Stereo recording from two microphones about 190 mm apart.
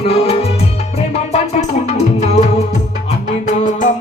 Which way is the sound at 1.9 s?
35° left (ahead or behind).